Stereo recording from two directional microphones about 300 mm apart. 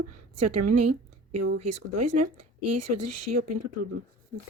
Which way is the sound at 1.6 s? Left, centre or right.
Right.